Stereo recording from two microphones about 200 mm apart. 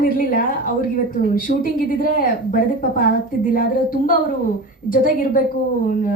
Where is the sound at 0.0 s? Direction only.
45° left (ahead or behind).